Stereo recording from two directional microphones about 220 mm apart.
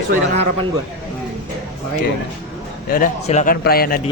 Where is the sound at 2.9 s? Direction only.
35° left (ahead or behind).